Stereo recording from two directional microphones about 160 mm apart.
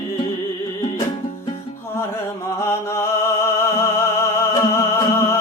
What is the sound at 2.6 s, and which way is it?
Music, 15° left (ahead or behind).